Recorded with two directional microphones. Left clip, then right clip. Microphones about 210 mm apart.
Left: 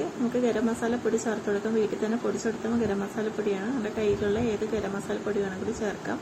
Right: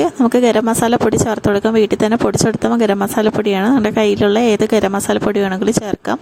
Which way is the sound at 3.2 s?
55° right (ahead or behind).